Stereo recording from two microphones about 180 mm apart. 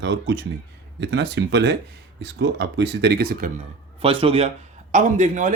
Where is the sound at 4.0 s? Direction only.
30° right (ahead or behind).